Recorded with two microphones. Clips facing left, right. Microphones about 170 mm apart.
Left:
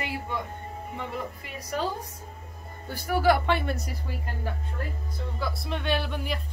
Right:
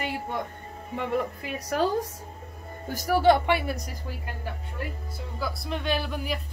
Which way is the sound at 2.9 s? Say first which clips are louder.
Right 4 dB; 45° right (ahead or behind).